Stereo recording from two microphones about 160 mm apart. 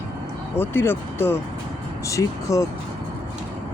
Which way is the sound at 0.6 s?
15° left (ahead or behind).